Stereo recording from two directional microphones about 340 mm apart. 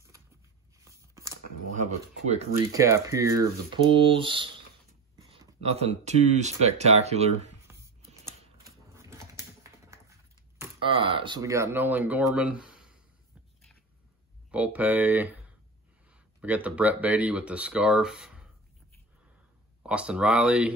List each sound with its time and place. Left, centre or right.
0.7 s a sound: centre
1.8 s speech: centre
2.8 s speech: centre
7.6 s typing: centre
10.6 s speech: centre
14.5 s speech: centre
19.9 s speech: centre